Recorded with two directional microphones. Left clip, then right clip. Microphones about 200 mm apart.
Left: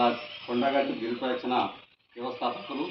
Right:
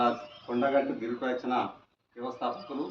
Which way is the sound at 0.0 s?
5° right (ahead or behind).